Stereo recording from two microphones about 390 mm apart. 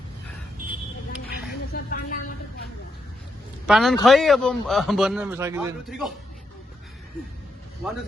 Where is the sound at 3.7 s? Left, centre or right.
Centre.